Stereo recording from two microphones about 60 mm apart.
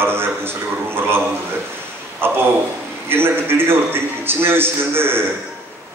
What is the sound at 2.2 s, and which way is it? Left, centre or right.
A man's voice, right.